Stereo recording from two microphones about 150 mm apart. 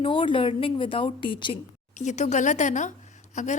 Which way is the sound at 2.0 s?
50° left (ahead or behind).